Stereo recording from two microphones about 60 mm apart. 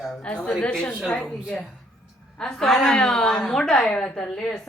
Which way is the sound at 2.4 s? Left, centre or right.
Centre.